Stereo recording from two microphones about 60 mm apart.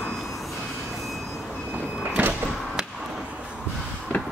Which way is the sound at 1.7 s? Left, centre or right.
Right.